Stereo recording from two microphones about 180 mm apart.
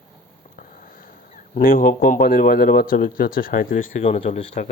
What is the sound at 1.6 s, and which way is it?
Speech, 50° left (ahead or behind).